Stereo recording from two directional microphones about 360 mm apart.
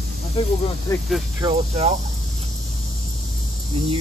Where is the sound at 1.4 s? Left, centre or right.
Centre.